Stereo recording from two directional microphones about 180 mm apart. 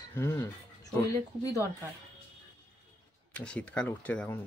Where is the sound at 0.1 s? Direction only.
10° left (ahead or behind).